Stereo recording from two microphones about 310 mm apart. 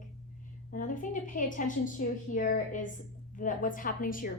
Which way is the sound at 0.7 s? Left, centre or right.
Left.